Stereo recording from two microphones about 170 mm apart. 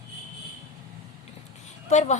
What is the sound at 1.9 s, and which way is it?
Speech, 40° left (ahead or behind).